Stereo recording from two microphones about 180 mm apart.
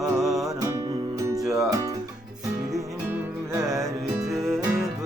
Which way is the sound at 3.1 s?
15° right (ahead or behind).